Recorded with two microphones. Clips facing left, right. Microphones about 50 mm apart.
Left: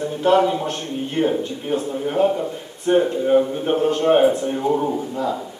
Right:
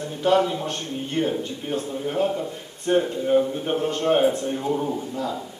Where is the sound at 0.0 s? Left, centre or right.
Centre.